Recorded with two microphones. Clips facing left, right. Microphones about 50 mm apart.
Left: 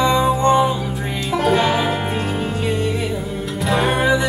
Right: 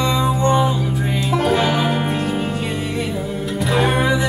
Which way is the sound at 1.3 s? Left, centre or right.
Centre.